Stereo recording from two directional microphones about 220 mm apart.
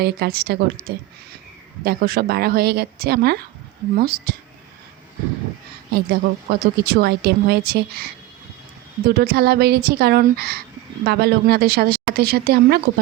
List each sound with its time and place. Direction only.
0.0 s speech: 45° right (ahead or behind)
5.9 s speech: 45° right (ahead or behind)